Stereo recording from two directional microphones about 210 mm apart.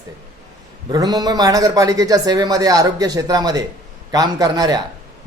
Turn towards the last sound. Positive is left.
turn(degrees=-20)  # may be behind; listen again after turning